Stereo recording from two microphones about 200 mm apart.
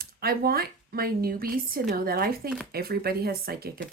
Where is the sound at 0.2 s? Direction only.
50° right (ahead or behind).